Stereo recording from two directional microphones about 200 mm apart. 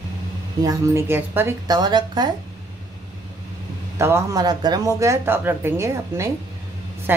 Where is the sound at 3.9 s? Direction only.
15° right (ahead or behind).